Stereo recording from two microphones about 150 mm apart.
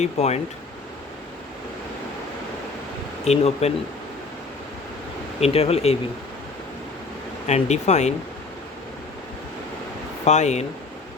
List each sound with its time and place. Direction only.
0.0 s speech: 45° left (ahead or behind)
3.2 s speech: 45° left (ahead or behind)
5.4 s speech: 45° left (ahead or behind)
7.4 s speech: 50° left (ahead or behind)
10.2 s speech: 50° left (ahead or behind)